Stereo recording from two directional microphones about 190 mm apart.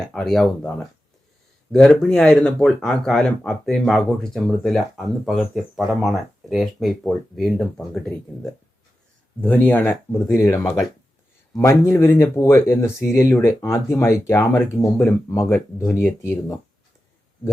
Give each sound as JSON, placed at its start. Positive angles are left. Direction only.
{"t": 0.1, "sound": "speech", "side_deg": 5}